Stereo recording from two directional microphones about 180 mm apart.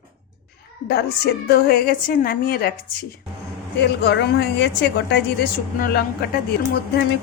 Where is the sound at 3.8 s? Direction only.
70° left (ahead or behind).